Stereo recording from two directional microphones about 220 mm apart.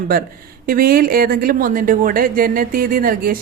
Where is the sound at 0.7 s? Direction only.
40° right (ahead or behind).